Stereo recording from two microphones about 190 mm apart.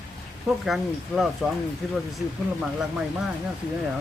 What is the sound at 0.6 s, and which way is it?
Speech, centre (ahead or behind).